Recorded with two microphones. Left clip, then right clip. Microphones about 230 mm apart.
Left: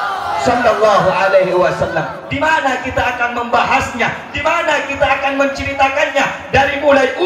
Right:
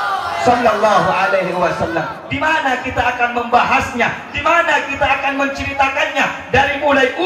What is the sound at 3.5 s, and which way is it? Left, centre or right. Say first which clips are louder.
A man's voice: even; left.